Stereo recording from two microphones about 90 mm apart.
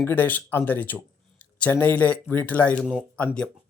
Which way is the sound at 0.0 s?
25° left (ahead or behind).